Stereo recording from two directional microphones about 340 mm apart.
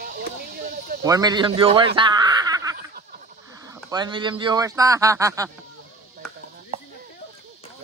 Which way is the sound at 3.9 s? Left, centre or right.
Centre.